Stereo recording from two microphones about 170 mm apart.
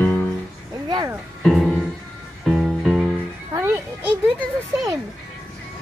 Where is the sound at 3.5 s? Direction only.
15° right (ahead or behind).